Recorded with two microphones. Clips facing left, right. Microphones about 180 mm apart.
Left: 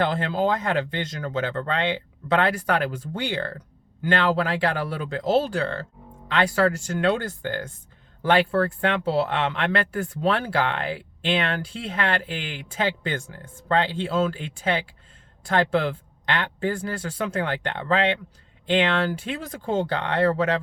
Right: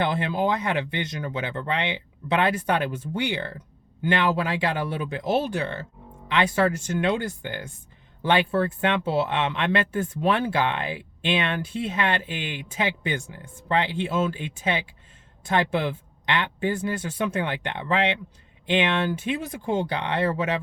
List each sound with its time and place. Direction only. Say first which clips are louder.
0.0 s speech: left 1 dB; 15° right (ahead or behind)